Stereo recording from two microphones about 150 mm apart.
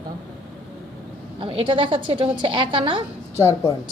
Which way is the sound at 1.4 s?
35° right (ahead or behind).